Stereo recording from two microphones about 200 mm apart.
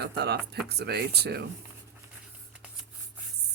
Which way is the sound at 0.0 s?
55° right (ahead or behind).